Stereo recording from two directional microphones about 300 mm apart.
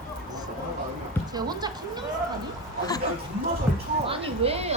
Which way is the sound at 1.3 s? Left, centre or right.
Centre.